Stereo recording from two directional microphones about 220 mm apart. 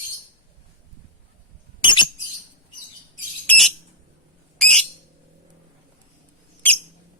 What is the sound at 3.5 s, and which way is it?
Bird, centre (ahead or behind).